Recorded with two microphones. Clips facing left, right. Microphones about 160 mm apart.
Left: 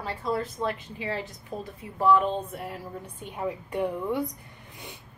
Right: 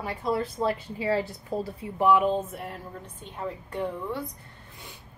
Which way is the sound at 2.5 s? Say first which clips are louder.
Left 1 dB; centre (ahead or behind).